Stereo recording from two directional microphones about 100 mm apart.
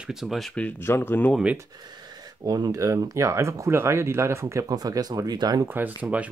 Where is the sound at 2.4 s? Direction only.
40° right (ahead or behind).